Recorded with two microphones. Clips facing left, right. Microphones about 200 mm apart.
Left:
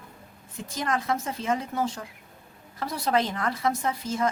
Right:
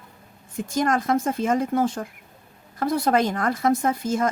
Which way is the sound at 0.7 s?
50° right (ahead or behind).